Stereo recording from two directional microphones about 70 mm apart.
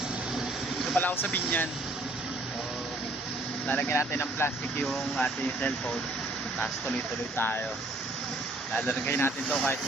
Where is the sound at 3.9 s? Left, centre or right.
Left.